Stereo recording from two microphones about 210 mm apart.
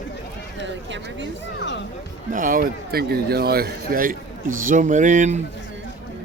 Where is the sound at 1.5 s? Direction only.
60° left (ahead or behind).